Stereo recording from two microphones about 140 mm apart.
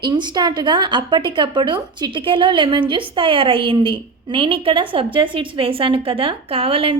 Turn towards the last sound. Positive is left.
turn(degrees=-40)  # may be behind; listen again after turning